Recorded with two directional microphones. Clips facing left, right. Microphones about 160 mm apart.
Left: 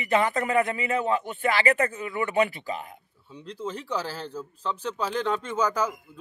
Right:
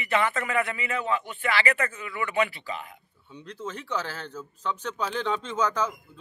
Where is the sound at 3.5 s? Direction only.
35° left (ahead or behind).